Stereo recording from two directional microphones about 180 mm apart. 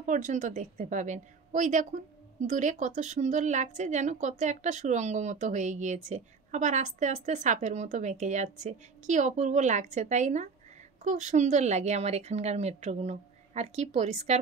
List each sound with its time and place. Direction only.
0.0 s a woman's voice: 45° right (ahead or behind)